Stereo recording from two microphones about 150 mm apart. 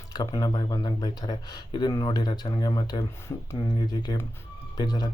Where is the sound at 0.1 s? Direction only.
25° left (ahead or behind).